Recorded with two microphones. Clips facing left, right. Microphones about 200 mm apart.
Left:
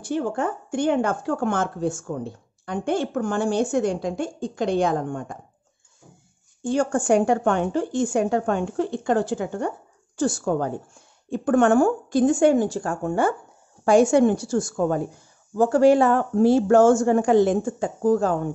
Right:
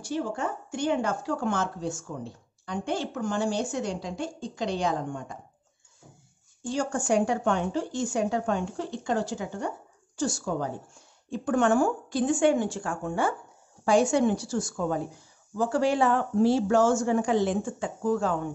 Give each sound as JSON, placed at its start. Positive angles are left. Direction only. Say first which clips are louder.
{"t": 0.0, "sound": "speech", "louder": "left 5 dB", "side_deg": 55}
{"t": 6.6, "sound": "speech", "louder": "left 7 dB", "side_deg": 55}